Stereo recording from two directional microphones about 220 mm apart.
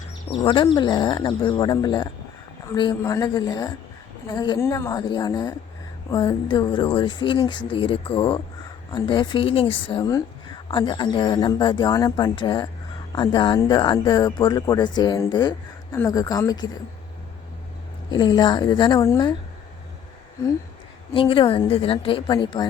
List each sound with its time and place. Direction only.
0.3 s a woman's voice: 20° left (ahead or behind)
18.1 s a woman's voice: 20° left (ahead or behind)
21.1 s a woman's voice: 25° left (ahead or behind)